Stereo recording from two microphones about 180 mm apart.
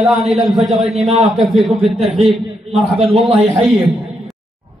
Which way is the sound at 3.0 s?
30° right (ahead or behind).